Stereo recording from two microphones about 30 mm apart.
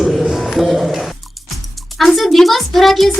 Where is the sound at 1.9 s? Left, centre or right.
Centre.